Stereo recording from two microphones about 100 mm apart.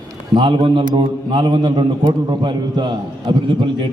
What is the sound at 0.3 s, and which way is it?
A man's voice, 55° right (ahead or behind).